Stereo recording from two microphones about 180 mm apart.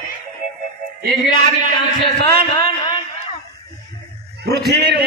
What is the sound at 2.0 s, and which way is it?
Speech, 55° right (ahead or behind).